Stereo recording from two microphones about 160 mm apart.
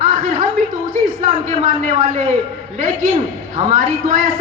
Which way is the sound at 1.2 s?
50° right (ahead or behind).